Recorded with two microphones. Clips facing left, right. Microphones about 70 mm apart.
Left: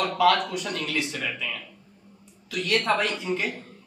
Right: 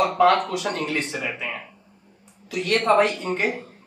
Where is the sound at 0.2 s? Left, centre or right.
Right.